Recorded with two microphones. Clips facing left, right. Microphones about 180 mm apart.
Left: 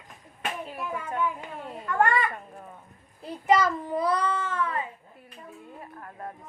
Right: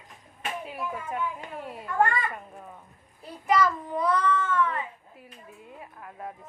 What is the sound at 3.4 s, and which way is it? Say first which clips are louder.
A child's voice: left 1 dB; 25° left (ahead or behind).